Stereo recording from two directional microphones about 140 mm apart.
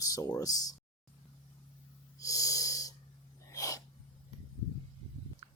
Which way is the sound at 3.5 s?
25° left (ahead or behind).